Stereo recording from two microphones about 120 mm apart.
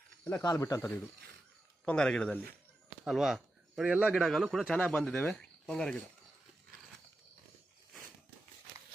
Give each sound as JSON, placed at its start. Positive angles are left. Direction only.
{"t": 0.4, "sound": "speech", "side_deg": 30}
{"t": 1.9, "sound": "speech", "side_deg": 5}
{"t": 4.7, "sound": "speech", "side_deg": 10}